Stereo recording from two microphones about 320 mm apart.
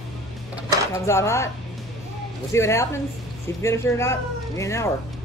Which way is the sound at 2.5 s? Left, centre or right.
Centre.